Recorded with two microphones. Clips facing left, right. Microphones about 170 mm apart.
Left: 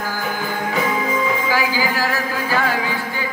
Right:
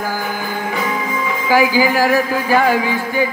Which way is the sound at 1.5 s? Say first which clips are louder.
Right 7 dB; 15° right (ahead or behind).